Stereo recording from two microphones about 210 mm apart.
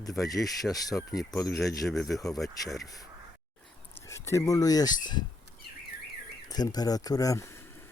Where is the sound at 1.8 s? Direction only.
Centre (ahead or behind).